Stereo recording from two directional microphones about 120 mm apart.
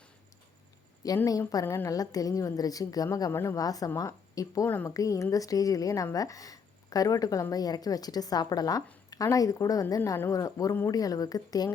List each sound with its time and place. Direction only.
1.0 s a woman's voice: 30° left (ahead or behind)